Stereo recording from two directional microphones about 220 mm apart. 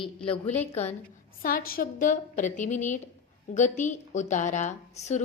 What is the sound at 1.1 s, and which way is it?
A woman's voice, 40° left (ahead or behind).